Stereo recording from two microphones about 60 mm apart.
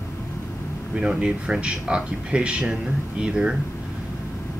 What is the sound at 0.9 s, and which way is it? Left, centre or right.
Speech, centre.